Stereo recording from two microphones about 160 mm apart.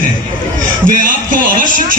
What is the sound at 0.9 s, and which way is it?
Speech, 60° right (ahead or behind).